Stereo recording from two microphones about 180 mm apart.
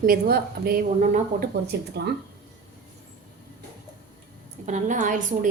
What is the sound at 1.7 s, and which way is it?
Speech, 65° right (ahead or behind).